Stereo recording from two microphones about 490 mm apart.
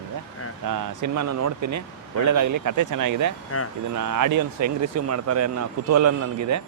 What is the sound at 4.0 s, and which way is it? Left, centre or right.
Speech, right.